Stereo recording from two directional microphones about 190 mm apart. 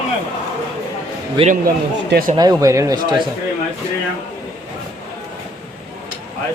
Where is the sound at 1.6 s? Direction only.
50° right (ahead or behind).